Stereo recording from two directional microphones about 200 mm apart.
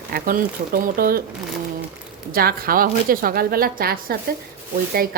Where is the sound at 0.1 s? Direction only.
45° right (ahead or behind).